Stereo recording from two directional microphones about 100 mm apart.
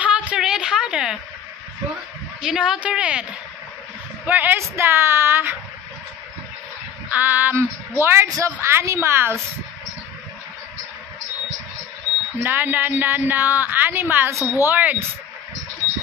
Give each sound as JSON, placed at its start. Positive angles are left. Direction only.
{"t": 0.0, "sound": "a sound", "side_deg": -10}
{"t": 2.4, "sound": "a woman's voice", "side_deg": -5}
{"t": 7.1, "sound": "a woman's voice", "side_deg": -20}
{"t": 12.4, "sound": "a woman's voice", "side_deg": -20}